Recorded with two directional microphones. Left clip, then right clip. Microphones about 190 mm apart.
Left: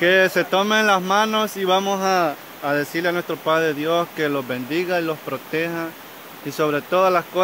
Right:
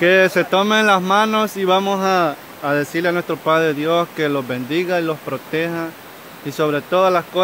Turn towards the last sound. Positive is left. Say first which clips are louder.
# right 2 dB
turn(degrees=0)  # may be behind; listen again after turning